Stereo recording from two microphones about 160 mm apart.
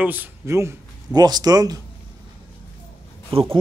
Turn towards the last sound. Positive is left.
turn(degrees=-35)  # may be behind; listen again after turning